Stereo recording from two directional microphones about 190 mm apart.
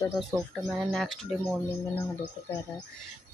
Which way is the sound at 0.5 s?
Centre (ahead or behind).